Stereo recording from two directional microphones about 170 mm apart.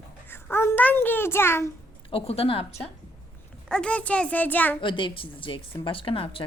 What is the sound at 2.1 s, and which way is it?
Speech, 35° left (ahead or behind).